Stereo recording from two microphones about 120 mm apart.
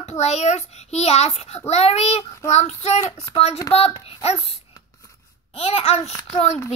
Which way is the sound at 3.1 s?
30° left (ahead or behind).